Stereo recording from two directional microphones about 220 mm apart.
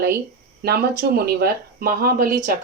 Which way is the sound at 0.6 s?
45° right (ahead or behind).